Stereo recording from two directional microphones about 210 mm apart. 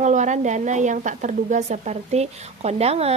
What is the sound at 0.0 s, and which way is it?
A woman's voice, 35° right (ahead or behind).